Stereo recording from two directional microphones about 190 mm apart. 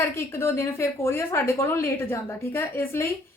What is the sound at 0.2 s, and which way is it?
A woman's voice, 15° left (ahead or behind).